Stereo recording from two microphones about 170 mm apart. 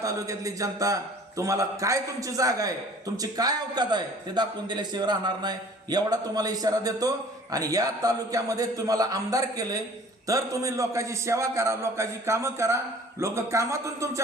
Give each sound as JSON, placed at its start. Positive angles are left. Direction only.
{"t": 0.0, "sound": "a man's voice", "side_deg": -20}